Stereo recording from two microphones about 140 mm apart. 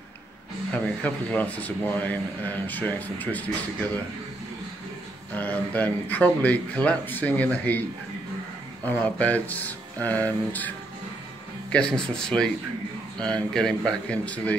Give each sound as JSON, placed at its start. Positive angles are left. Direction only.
{"t": 0.7, "sound": "a man's voice", "side_deg": 10}
{"t": 5.3, "sound": "a man's voice", "side_deg": 10}
{"t": 8.8, "sound": "a man's voice", "side_deg": 10}
{"t": 11.7, "sound": "a man's voice", "side_deg": 5}